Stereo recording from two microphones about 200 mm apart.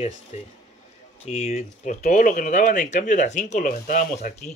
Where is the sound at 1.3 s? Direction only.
30° left (ahead or behind).